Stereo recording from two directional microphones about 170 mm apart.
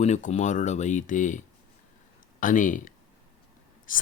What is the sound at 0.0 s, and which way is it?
Speech, 45° left (ahead or behind).